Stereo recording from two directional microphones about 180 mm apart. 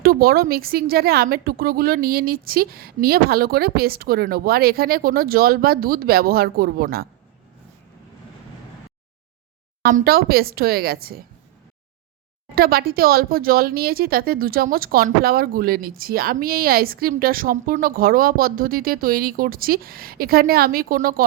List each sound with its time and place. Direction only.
0.0 s speech: 55° right (ahead or behind)
9.8 s speech: 60° right (ahead or behind)
12.5 s speech: 55° right (ahead or behind)